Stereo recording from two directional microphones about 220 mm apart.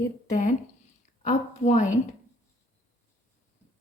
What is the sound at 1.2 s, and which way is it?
Speech, 35° left (ahead or behind).